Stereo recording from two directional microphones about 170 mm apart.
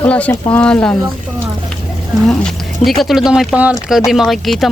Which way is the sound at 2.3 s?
Centre (ahead or behind).